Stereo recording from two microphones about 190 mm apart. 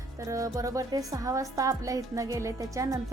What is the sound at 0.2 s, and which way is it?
Speech, 15° right (ahead or behind).